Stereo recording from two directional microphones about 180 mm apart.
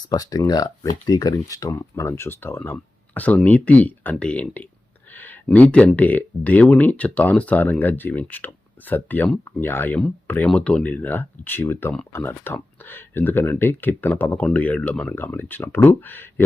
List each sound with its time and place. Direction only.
0.1 s speech: 20° left (ahead or behind)